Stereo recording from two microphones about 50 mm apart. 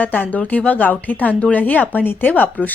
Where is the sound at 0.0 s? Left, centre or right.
Left.